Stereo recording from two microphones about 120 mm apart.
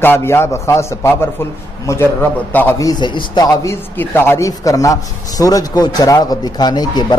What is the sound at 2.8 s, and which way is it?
Speech, 35° left (ahead or behind).